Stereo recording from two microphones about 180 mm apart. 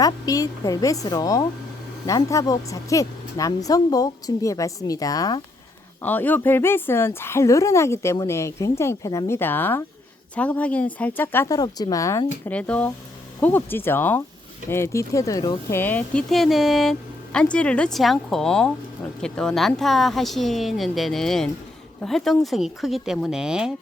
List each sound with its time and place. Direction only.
0.0 s speech: 20° left (ahead or behind)
15.8 s speech: 10° left (ahead or behind)